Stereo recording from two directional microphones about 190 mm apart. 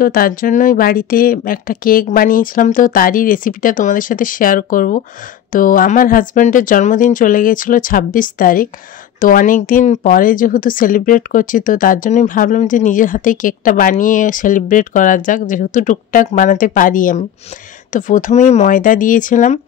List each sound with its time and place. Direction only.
0.0 s speech: 50° left (ahead or behind)